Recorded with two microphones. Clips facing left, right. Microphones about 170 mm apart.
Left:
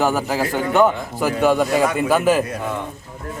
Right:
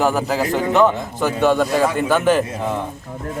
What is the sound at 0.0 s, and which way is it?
A man's voice, centre (ahead or behind).